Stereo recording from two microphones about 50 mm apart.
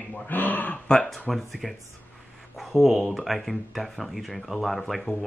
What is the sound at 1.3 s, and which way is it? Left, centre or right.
Speech, centre.